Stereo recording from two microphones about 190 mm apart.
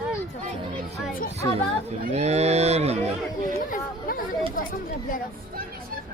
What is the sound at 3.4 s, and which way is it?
Chatter, 45° left (ahead or behind).